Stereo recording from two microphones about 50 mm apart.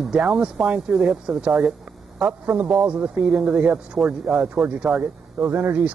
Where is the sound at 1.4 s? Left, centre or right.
Centre.